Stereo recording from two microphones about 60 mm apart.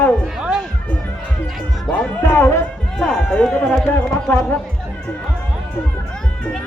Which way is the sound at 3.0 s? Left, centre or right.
Centre.